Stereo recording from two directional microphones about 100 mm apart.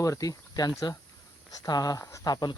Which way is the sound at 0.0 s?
35° left (ahead or behind).